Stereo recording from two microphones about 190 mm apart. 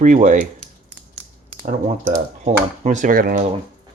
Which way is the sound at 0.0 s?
45° right (ahead or behind).